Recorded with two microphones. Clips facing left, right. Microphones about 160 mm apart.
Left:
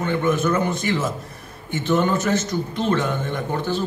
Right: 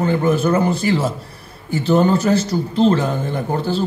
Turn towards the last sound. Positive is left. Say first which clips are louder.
# right 3 dB
turn(degrees=-30)  # may be behind; listen again after turning